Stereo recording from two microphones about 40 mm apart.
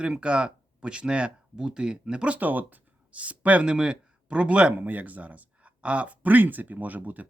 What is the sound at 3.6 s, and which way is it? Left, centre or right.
A man's voice, right.